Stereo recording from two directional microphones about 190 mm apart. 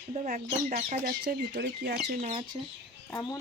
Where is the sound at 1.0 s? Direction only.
50° right (ahead or behind).